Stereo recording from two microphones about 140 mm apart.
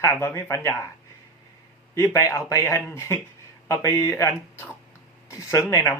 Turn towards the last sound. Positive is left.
turn(degrees=20)  # may be behind; listen again after turning